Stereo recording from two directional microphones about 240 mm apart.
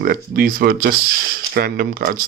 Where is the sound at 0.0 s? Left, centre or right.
Right.